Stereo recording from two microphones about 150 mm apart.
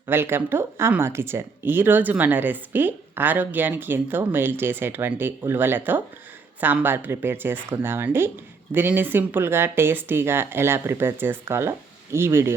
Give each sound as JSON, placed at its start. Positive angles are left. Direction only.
{"t": 0.1, "sound": "speech", "side_deg": -15}